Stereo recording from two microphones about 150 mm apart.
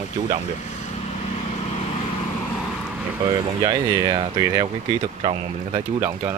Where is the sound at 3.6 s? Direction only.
30° right (ahead or behind).